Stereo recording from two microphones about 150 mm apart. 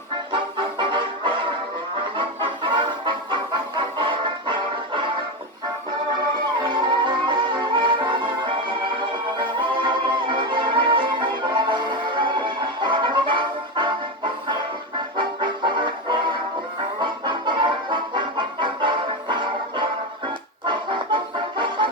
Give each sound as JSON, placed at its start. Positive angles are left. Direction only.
{"t": 0.3, "sound": "music", "side_deg": -30}
{"t": 6.6, "sound": "music", "side_deg": -30}
{"t": 15.1, "sound": "music", "side_deg": -30}